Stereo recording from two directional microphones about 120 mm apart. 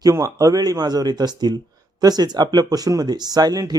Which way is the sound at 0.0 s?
30° right (ahead or behind).